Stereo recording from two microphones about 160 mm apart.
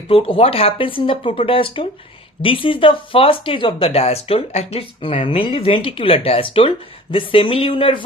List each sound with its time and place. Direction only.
0.1 s speech: 35° left (ahead or behind)